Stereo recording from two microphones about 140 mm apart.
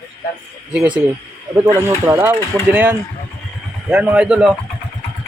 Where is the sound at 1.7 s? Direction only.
20° right (ahead or behind).